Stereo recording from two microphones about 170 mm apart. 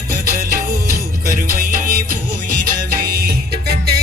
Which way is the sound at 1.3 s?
55° right (ahead or behind).